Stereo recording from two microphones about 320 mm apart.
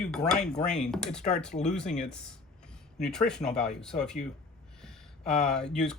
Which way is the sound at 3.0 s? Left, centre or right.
Centre.